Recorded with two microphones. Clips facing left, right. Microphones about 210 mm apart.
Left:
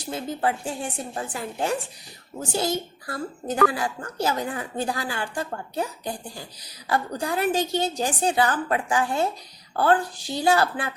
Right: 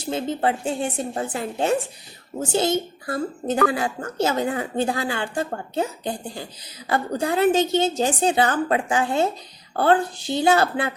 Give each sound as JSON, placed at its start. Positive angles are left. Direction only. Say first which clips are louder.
{"t": 0.0, "sound": "a child's voice", "louder": "right 3 dB", "side_deg": -25}